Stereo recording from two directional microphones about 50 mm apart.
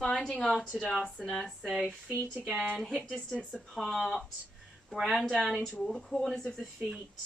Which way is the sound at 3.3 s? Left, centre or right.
Centre.